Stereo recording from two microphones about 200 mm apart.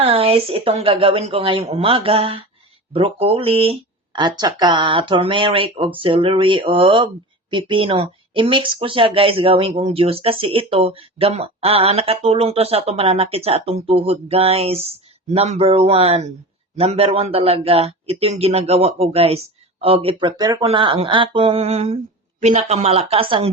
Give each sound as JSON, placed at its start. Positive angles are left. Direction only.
{"t": 0.0, "sound": "a man's voice", "side_deg": -30}